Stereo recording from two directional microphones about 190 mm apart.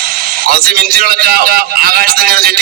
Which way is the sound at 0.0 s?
50° right (ahead or behind).